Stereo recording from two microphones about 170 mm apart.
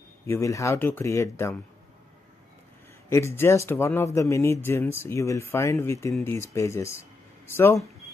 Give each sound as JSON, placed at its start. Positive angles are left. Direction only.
{"t": 0.3, "sound": "speech", "side_deg": 20}
{"t": 3.1, "sound": "speech", "side_deg": 15}